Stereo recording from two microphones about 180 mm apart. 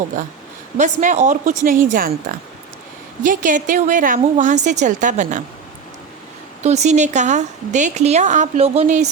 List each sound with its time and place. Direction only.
0.8 s a woman's voice: 40° right (ahead or behind)
6.6 s a woman's voice: 40° right (ahead or behind)